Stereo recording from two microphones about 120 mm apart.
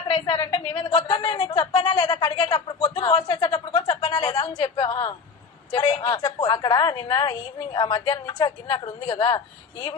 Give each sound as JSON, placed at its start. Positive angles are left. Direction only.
{"t": 0.1, "sound": "a woman's voice", "side_deg": 40}